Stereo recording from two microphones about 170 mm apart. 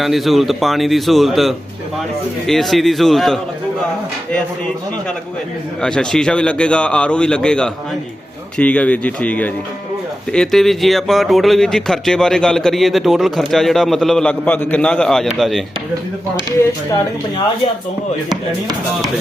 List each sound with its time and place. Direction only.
0.0 s speech: centre (ahead or behind)
5.8 s speech: 5° left (ahead or behind)